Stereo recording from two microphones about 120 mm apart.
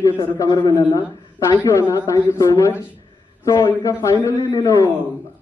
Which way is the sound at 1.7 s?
25° left (ahead or behind).